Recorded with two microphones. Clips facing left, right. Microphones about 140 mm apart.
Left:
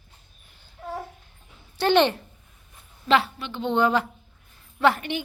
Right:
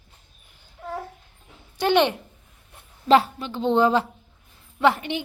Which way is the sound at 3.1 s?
40° right (ahead or behind).